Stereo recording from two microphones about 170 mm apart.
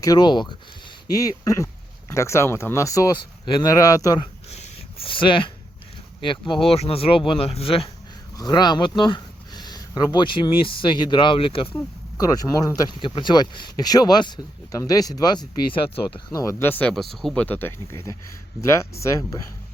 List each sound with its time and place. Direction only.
0.0 s speech: 25° left (ahead or behind)
4.5 s a sound: 30° left (ahead or behind)
6.2 s speech: 30° left (ahead or behind)
12.1 s speech: 20° left (ahead or behind)